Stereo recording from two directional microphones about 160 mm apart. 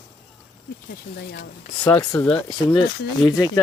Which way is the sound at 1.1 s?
80° left.